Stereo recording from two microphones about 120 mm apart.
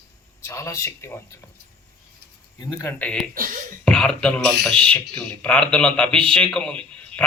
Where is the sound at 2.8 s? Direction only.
15° left (ahead or behind).